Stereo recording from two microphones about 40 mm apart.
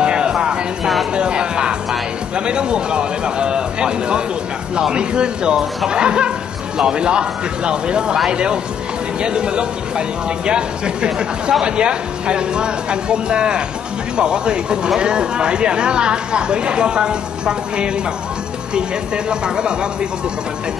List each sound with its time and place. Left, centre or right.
0.0 s music: right
2.3 s speech: right
19.4 s speech: right